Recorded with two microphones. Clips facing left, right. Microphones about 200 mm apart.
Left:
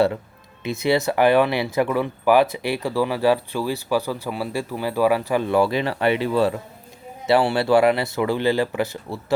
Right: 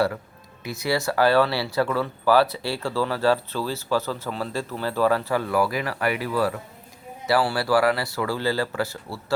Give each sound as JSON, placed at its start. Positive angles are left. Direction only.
{"t": 0.6, "sound": "speech", "side_deg": 25}